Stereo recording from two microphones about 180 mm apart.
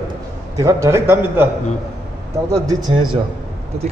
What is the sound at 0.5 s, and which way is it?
Speech, 15° right (ahead or behind).